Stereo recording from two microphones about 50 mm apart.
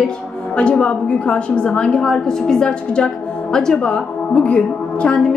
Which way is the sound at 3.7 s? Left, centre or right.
Left.